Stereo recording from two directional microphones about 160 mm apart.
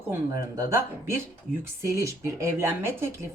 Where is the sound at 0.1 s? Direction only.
20° right (ahead or behind).